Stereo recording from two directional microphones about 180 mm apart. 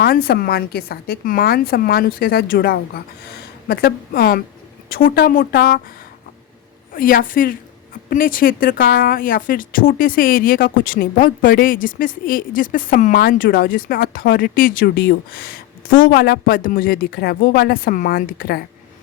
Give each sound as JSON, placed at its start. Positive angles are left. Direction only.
{"t": 0.0, "sound": "a woman's voice", "side_deg": 55}
{"t": 6.9, "sound": "speech", "side_deg": 50}